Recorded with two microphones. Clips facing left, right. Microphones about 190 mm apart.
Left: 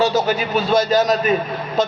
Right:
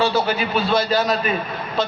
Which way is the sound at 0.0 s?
45° left (ahead or behind).